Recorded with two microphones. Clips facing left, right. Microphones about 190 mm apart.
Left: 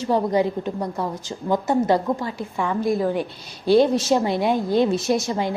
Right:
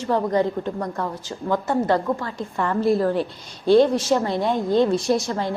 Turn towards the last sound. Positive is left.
turn(degrees=15)  # may be behind; listen again after turning